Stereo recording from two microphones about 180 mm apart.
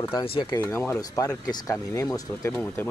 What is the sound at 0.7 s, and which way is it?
Speech, 15° left (ahead or behind).